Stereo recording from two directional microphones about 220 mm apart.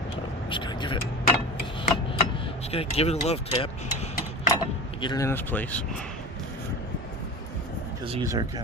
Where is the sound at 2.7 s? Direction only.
25° left (ahead or behind).